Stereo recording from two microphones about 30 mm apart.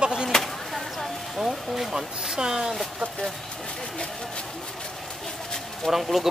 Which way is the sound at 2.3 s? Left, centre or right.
Right.